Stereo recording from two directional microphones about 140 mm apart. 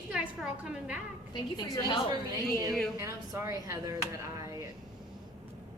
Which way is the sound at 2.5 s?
25° right (ahead or behind).